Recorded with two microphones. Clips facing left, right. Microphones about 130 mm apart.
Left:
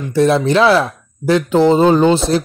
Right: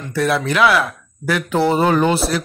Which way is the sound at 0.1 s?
25° left (ahead or behind).